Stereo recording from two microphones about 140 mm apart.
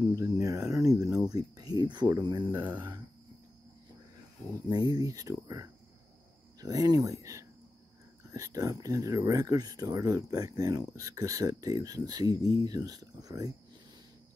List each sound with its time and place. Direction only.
0.1 s speech: 25° right (ahead or behind)
4.6 s speech: 30° right (ahead or behind)